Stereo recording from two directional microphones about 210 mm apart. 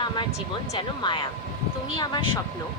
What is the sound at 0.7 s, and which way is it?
Speech, 20° left (ahead or behind).